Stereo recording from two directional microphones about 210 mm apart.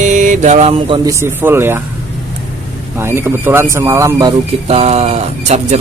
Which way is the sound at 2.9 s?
10° right (ahead or behind).